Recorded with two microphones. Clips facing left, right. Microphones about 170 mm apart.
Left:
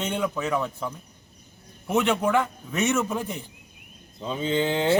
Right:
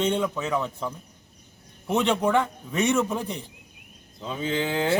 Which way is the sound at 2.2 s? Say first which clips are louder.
Even; 5° left (ahead or behind).